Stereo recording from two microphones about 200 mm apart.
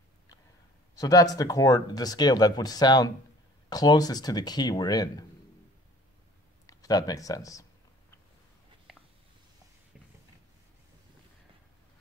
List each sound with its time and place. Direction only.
0.9 s speech: 20° left (ahead or behind)
6.6 s speech: 15° left (ahead or behind)